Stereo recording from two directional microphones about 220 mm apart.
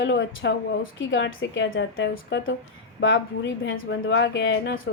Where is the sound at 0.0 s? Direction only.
55° left (ahead or behind).